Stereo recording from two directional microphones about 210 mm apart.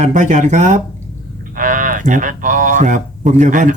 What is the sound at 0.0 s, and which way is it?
Speech, 35° right (ahead or behind).